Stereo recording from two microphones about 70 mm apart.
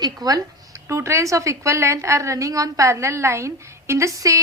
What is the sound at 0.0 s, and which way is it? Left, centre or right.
Speech, right.